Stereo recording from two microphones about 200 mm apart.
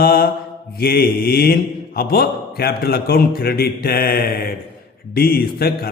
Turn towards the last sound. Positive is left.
turn(degrees=50)  # may be behind; listen again after turning